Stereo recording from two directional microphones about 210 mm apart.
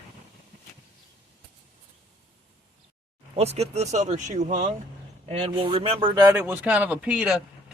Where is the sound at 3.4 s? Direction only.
30° right (ahead or behind).